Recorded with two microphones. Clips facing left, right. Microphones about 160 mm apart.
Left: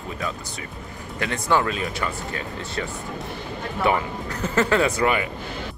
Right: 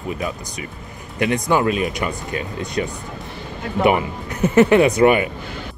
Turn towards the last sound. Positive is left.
turn(degrees=-20)  # may be behind; listen again after turning